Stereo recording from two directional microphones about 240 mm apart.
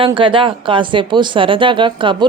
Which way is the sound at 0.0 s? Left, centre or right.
Right.